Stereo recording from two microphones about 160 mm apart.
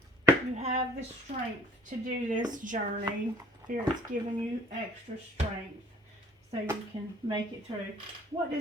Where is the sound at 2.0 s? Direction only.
55° right (ahead or behind).